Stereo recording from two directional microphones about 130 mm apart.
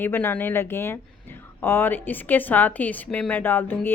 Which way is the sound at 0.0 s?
15° left (ahead or behind).